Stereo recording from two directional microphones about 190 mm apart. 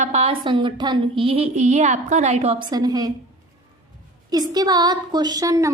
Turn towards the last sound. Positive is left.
turn(degrees=-15)  # may be behind; listen again after turning